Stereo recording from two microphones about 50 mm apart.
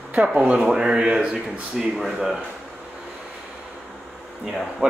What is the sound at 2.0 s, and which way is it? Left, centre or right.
Speech, centre.